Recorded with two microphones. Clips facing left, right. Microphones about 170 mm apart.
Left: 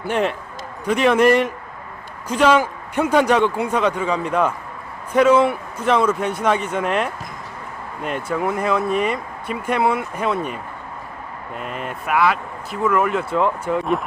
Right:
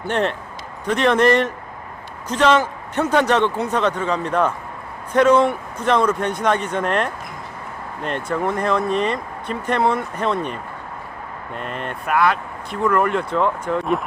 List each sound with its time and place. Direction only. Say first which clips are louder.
0.0 s speech: even; 5° left (ahead or behind)